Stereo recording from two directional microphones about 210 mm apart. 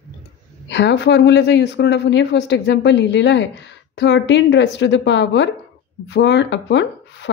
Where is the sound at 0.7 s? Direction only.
55° left (ahead or behind).